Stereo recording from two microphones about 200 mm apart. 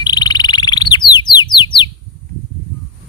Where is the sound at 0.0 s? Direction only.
20° left (ahead or behind).